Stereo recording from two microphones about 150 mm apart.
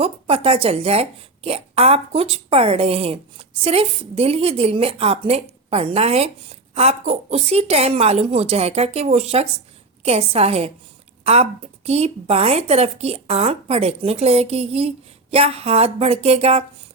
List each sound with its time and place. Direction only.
0.0 s a woman's voice: 40° right (ahead or behind)